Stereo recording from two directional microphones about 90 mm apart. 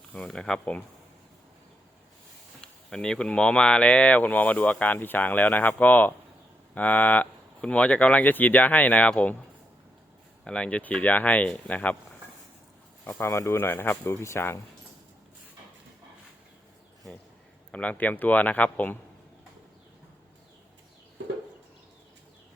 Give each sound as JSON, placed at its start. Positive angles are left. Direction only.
{"t": 0.3, "sound": "speech", "side_deg": 10}
{"t": 2.6, "sound": "speech", "side_deg": 5}
{"t": 10.4, "sound": "speech", "side_deg": 10}
{"t": 13.1, "sound": "speech", "side_deg": 30}
{"t": 17.7, "sound": "speech", "side_deg": 15}